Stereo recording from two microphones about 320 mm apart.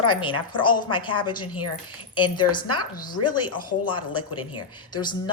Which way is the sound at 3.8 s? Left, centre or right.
Centre.